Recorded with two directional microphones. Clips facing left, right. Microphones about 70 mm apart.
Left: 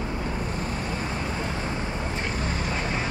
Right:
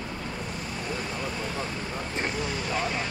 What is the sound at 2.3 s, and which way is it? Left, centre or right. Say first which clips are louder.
Vehicle: left 1 dB; left.